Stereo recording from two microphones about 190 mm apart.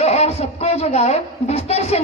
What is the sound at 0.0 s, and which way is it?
A man's voice, 35° left (ahead or behind).